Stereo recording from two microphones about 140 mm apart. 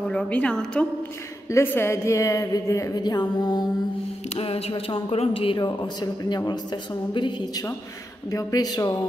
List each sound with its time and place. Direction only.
0.1 s a woman's voice: 5° left (ahead or behind)
1.5 s a woman's voice: 15° left (ahead or behind)
4.4 s a woman's voice: 45° left (ahead or behind); by 8.9 s 30° left (ahead or behind)